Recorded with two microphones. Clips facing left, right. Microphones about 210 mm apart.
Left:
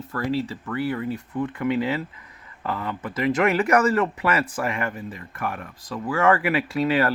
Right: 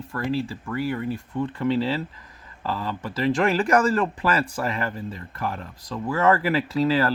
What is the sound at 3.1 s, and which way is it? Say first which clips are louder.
Speech: even; 30° right (ahead or behind).